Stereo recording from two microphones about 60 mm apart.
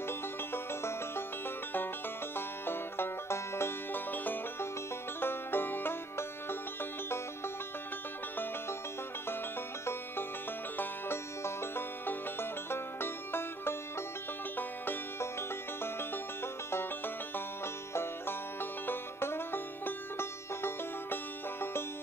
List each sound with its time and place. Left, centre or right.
0.5 s music: left
2.3 s banjo: left
3.9 s music: left
5.2 s banjo: left
10.8 s music: left
17.9 s music: left